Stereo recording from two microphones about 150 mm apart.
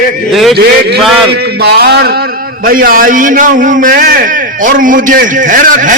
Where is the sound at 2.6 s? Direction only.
70° right (ahead or behind).